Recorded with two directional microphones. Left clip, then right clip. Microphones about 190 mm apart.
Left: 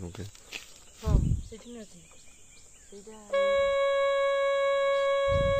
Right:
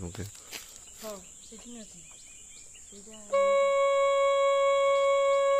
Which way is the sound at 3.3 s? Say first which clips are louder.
Right 1 dB; 20° left (ahead or behind).